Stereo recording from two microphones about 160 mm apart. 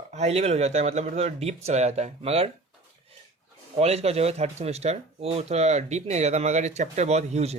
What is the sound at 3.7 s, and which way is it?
Speech, 40° right (ahead or behind).